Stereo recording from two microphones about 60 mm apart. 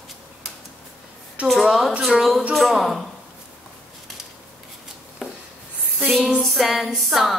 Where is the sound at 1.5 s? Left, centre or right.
Centre.